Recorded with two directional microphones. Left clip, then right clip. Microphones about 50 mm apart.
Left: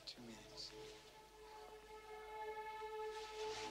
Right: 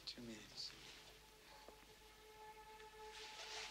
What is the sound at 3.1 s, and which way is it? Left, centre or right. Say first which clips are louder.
Music: left 6 dB; right.